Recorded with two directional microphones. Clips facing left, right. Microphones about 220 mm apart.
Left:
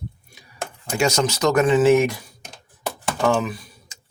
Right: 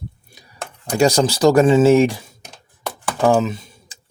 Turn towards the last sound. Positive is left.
turn(degrees=-25)  # may be behind; listen again after turning